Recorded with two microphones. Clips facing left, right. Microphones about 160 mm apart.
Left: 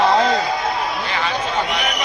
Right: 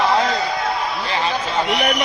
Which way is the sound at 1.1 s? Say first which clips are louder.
Right 3 dB; 30° right (ahead or behind).